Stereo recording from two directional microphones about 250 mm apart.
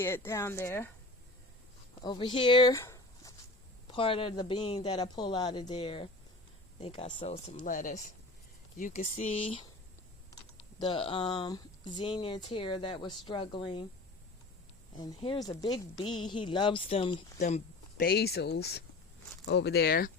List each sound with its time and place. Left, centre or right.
0.0 s speech: centre
2.0 s a woman's voice: centre
10.8 s a woman's voice: centre
14.9 s a woman's voice: centre; by 20.1 s left